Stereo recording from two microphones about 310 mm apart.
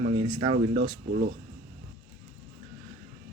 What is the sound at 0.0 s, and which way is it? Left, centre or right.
Speech, centre.